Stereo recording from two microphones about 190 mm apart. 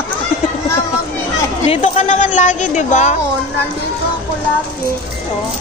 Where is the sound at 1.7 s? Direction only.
35° left (ahead or behind).